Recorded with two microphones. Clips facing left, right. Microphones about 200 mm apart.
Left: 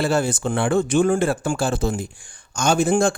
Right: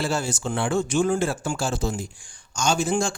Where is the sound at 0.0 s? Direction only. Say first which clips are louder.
Left 6 dB; 55° left (ahead or behind).